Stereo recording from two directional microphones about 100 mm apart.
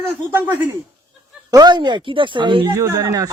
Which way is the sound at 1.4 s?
45° right (ahead or behind).